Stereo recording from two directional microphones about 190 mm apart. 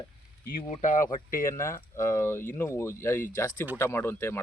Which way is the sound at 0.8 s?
40° left (ahead or behind).